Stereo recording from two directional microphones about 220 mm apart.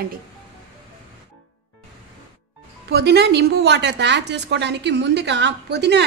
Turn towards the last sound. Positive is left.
turn(degrees=-50)  # may be behind; listen again after turning